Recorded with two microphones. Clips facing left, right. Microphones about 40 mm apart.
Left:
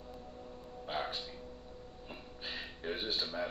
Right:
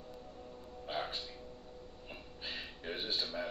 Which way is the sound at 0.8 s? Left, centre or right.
Centre.